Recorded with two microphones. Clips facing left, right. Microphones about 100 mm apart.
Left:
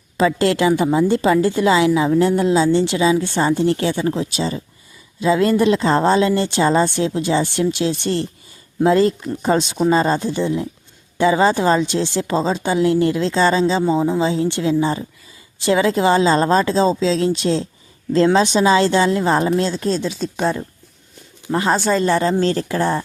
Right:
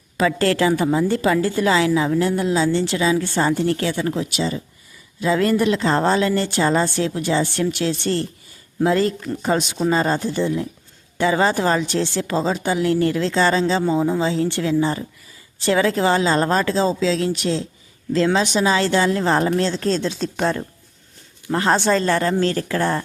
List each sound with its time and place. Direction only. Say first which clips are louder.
0.2 s a woman's voice: left 2 dB; 20° left (ahead or behind)
19.7 s speech: even; 10° left (ahead or behind)
22.0 s a woman's voice: left 2 dB; 20° left (ahead or behind)
22.8 s speech: left 1 dB; 15° left (ahead or behind)